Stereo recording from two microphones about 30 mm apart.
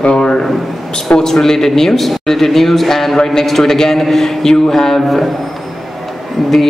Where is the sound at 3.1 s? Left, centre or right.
Centre.